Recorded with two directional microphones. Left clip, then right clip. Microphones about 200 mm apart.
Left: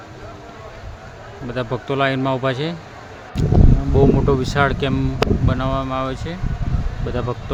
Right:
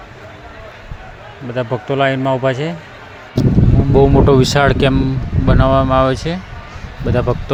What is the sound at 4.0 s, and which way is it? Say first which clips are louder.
Speech: right 6 dB; 40° right (ahead or behind).